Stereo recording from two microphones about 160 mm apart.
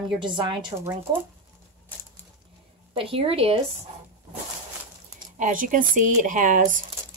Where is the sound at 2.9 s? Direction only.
35° right (ahead or behind).